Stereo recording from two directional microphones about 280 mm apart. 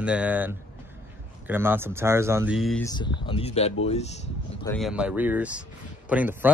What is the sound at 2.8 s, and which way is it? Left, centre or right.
Speech, centre.